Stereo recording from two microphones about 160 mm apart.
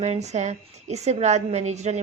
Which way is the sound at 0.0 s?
45° right (ahead or behind).